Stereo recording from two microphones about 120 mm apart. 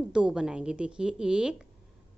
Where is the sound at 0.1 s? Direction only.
5° right (ahead or behind).